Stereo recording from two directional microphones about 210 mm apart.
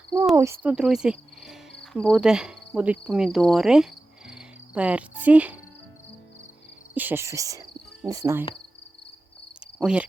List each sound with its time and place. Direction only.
0.3 s cricket: 10° right (ahead or behind)
6.9 s cricket: 10° right (ahead or behind)
9.7 s insect: 5° right (ahead or behind)